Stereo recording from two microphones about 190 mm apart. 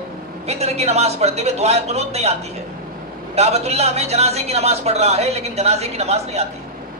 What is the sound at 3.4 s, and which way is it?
Speech, 35° right (ahead or behind).